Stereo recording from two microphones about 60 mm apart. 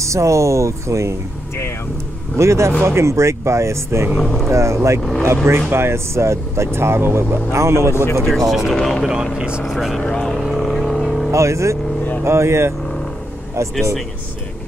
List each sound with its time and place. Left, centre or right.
0.0 s speech: right
2.3 s speech: right
4.2 s speech: centre
4.5 s speech: right
7.9 s speech: left
8.5 s speech: centre
9.7 s speech: centre
9.9 s vehicle: centre
11.3 s speech: right